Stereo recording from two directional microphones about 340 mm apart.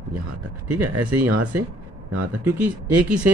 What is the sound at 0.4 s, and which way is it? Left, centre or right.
Speech, right.